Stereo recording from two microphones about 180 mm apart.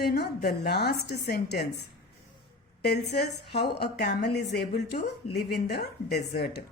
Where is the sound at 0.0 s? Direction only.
60° left (ahead or behind).